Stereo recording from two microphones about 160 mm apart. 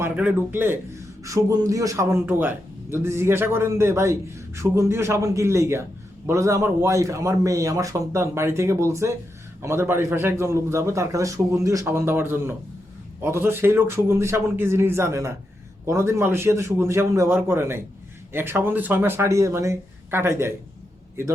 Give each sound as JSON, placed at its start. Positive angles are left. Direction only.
{"t": 0.0, "sound": "a man's voice", "side_deg": -15}